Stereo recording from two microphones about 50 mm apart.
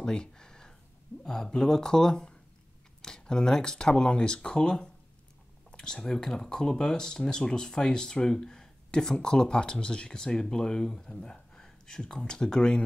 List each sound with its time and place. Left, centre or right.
0.0 s a sound: centre
1.2 s speech: centre
11.3 s speech: centre